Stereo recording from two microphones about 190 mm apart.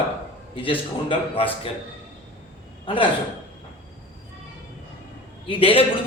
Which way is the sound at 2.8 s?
25° left (ahead or behind).